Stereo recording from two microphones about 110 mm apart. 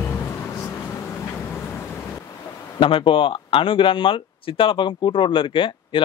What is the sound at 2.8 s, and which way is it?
Speech, 50° left (ahead or behind).